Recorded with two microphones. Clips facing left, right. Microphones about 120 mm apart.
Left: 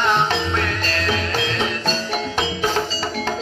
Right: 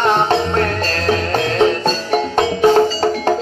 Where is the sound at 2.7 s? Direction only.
50° right (ahead or behind).